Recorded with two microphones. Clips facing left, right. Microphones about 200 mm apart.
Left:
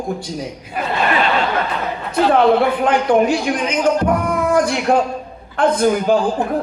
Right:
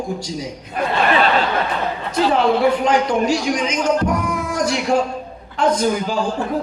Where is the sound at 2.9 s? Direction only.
55° left (ahead or behind).